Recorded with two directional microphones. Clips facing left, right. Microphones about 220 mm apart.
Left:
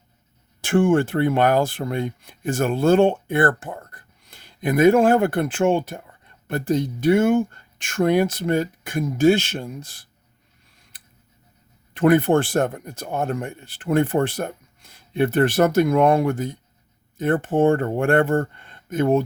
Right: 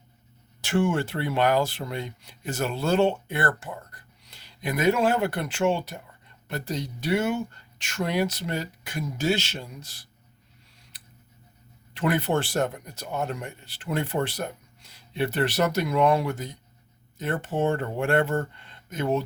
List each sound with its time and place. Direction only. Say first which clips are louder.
0.6 s speech: left 7 dB; 50° left (ahead or behind)
10.9 s a sound: right 1 dB; 50° left (ahead or behind)
11.9 s speech: left 8 dB; 50° left (ahead or behind)